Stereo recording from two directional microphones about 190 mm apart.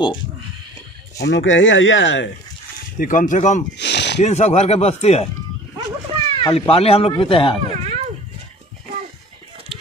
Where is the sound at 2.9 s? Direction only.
45° left (ahead or behind).